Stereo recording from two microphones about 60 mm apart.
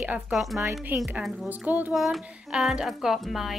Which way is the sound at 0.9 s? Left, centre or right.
Right.